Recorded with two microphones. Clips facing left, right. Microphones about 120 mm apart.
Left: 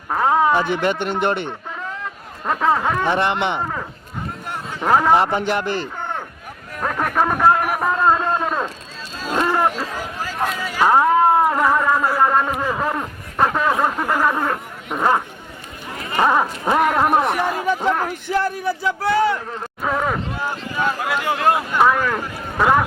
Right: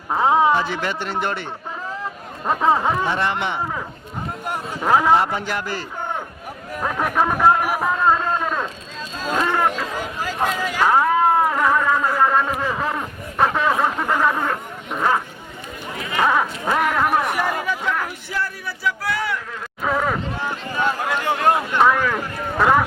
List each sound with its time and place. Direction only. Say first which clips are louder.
0.1 s a sound: even; 10° right (ahead or behind)
0.5 s a man's voice: left 3 dB; 15° left (ahead or behind)
2.5 s speech: even; 5° right (ahead or behind)
3.1 s a man's voice: left 3 dB; 20° left (ahead or behind)
4.8 s speech: left 1 dB; centre (ahead or behind)
5.1 s a man's voice: left 2 dB; 20° left (ahead or behind)
6.7 s speech: left 1 dB; 5° right (ahead or behind)
8.0 s a sound: left 1 dB; 15° left (ahead or behind)
9.2 s speech: left 1 dB; 5° left (ahead or behind)
10.5 s a sound: left 2 dB; 10° left (ahead or behind)
16.0 s a man's voice: left 2 dB; 30° left (ahead or behind)
18.4 s a man's voice: left 5 dB; 25° left (ahead or behind)
19.8 s speech: even; 5° left (ahead or behind)